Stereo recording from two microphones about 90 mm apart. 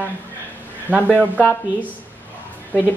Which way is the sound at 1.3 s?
15° left (ahead or behind).